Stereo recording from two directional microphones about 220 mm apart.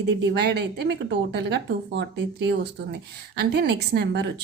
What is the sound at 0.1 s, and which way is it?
A woman's voice, 50° right (ahead or behind).